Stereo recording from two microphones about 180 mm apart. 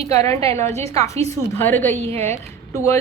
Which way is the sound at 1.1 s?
35° right (ahead or behind).